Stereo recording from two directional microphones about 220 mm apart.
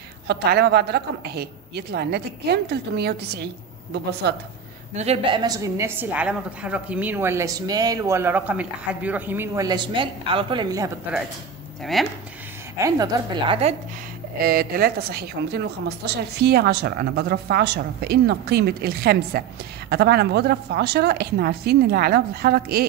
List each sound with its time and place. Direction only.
0.3 s a woman's voice: 45° right (ahead or behind)
4.9 s a woman's voice: 30° right (ahead or behind)
11.8 s speech: centre (ahead or behind)
12.7 s a woman's voice: 15° right (ahead or behind)
14.4 s a woman's voice: 40° right (ahead or behind)